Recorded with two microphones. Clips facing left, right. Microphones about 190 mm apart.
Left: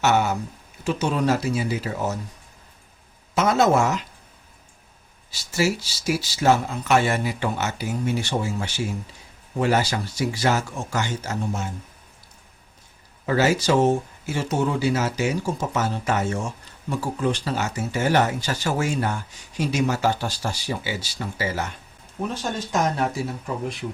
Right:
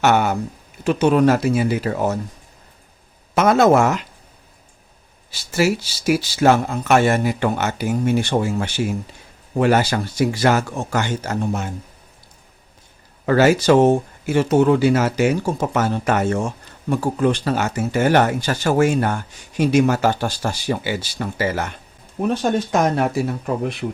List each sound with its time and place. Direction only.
0.0 s speech: 55° right (ahead or behind)
3.3 s speech: 60° right (ahead or behind)
5.3 s speech: 60° right (ahead or behind)
13.2 s speech: 60° right (ahead or behind)
23.8 s speech: 50° right (ahead or behind)